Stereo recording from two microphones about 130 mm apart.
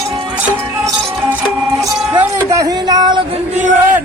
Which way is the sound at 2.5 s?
25° right (ahead or behind).